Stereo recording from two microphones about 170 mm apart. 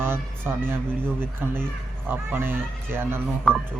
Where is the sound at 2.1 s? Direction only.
10° right (ahead or behind).